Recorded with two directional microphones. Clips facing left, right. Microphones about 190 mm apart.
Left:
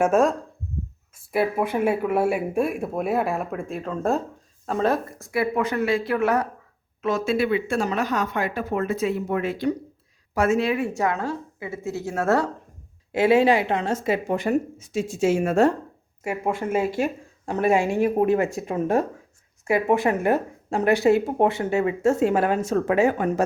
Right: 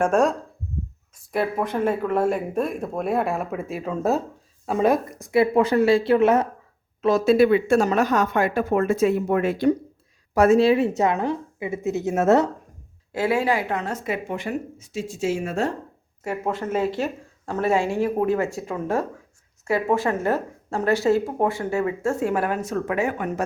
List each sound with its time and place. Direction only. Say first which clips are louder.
0.0 s a woman's voice: even; centre (ahead or behind); by 6.5 s 20° right (ahead or behind)
7.0 s speech: right 6 dB; 35° right (ahead or behind)
10.3 s a woman's voice: right 5 dB; 35° right (ahead or behind); by 12.5 s 20° right (ahead or behind)
13.1 s speech: left 4 dB; 20° left (ahead or behind); by 14.5 s 40° left (ahead or behind)
15.2 s a woman's voice: left 6 dB; 50° left (ahead or behind)
16.2 s speech: left 1 dB; 10° left (ahead or behind); by 23.4 s 35° left (ahead or behind)